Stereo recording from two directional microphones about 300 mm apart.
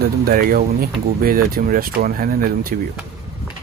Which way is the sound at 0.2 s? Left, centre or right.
Right.